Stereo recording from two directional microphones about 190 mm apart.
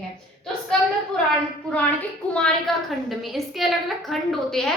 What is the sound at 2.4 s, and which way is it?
A woman's voice, 5° left (ahead or behind).